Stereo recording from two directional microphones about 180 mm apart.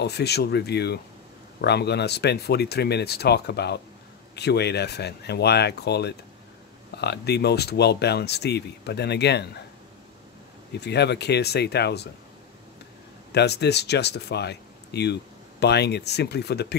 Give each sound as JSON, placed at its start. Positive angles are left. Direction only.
{"t": 0.0, "sound": "speech", "side_deg": 65}
{"t": 10.7, "sound": "speech", "side_deg": 65}
{"t": 13.3, "sound": "speech", "side_deg": 65}